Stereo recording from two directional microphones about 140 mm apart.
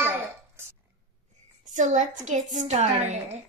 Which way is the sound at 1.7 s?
65° right (ahead or behind).